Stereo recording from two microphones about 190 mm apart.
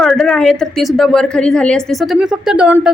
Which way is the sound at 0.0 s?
Centre (ahead or behind).